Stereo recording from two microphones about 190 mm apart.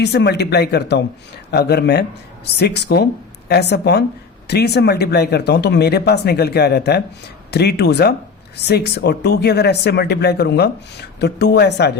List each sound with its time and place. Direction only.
0.0 s speech: 65° left (ahead or behind)